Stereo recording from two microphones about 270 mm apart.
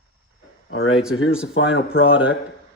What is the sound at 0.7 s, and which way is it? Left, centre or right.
Speech, left.